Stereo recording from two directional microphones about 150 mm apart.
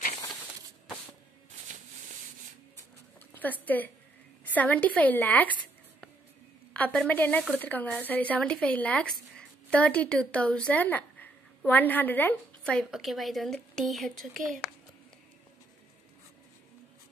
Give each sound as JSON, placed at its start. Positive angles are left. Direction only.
{"t": 3.6, "sound": "speech", "side_deg": 10}
{"t": 6.7, "sound": "a woman's voice", "side_deg": 10}
{"t": 12.9, "sound": "a woman's voice", "side_deg": 0}
{"t": 14.3, "sound": "speech", "side_deg": -60}